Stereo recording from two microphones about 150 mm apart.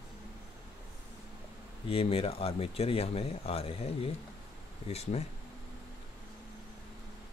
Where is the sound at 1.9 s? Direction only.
40° left (ahead or behind).